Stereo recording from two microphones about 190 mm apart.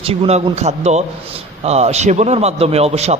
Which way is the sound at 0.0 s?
30° right (ahead or behind).